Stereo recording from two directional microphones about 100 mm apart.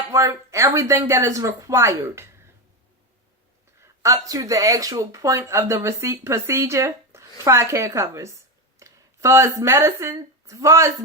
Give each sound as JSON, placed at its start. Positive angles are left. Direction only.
{"t": 0.1, "sound": "speech", "side_deg": -30}
{"t": 3.8, "sound": "speech", "side_deg": -30}